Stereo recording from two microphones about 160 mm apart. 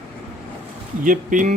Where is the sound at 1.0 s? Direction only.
55° right (ahead or behind).